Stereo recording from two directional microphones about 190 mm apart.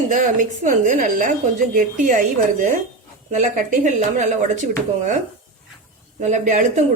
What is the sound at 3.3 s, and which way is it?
Speech, 40° right (ahead or behind).